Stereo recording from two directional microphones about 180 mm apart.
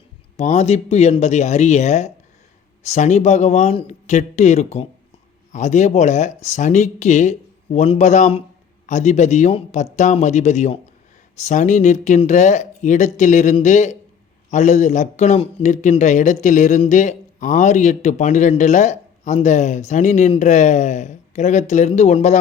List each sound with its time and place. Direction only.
0.3 s a man's voice: 35° left (ahead or behind)